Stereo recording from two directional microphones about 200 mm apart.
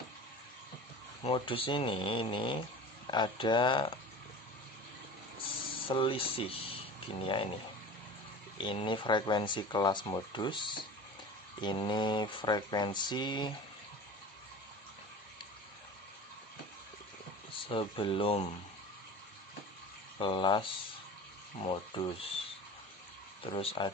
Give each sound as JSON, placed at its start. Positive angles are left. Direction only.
{"t": 1.2, "sound": "speech", "side_deg": 25}
{"t": 5.9, "sound": "speech", "side_deg": 25}
{"t": 8.5, "sound": "speech", "side_deg": 25}
{"t": 17.7, "sound": "speech", "side_deg": 25}
{"t": 20.1, "sound": "speech", "side_deg": 25}
{"t": 23.4, "sound": "speech", "side_deg": 25}